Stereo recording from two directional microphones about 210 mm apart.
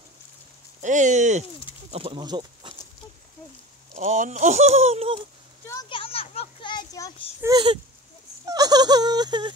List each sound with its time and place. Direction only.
0.8 s speech: 35° right (ahead or behind); by 2.7 s 20° right (ahead or behind)
3.9 s speech: 35° right (ahead or behind)
5.7 s a sound: 20° left (ahead or behind)
7.4 s speech: 20° right (ahead or behind)